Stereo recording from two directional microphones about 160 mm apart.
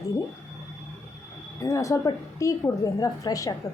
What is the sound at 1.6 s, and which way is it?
A woman's voice, 20° left (ahead or behind).